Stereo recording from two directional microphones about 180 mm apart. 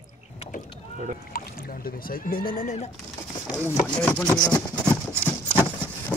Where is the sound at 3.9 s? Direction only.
5° left (ahead or behind).